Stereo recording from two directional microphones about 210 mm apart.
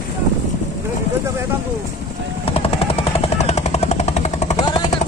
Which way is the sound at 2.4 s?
30° left (ahead or behind).